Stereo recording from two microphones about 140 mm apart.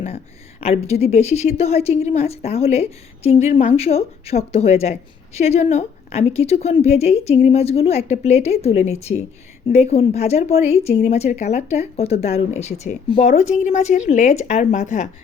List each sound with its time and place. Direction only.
0.6 s a woman's voice: 45° left (ahead or behind)